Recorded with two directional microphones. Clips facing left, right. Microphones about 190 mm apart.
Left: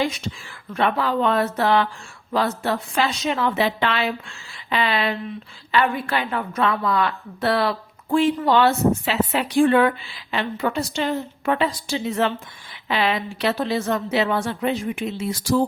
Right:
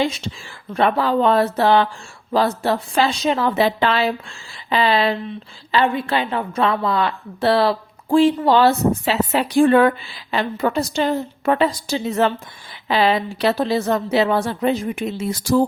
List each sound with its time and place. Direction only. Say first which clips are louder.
0.0 s a woman's voice: right 2 dB; 25° right (ahead or behind); by 15.6 s 45° right (ahead or behind)